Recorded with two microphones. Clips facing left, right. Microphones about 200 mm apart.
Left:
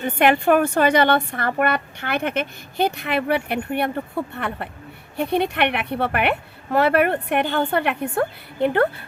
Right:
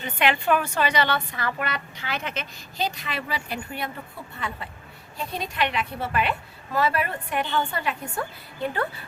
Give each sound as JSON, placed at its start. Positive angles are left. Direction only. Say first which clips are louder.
{"t": 0.0, "sound": "a woman's voice", "louder": "left 7 dB", "side_deg": 50}